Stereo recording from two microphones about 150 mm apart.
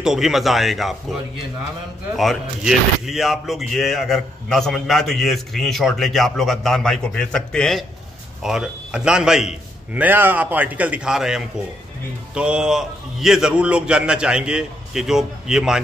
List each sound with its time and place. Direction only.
0.0 s speech: 5° right (ahead or behind)
2.1 s speech: centre (ahead or behind)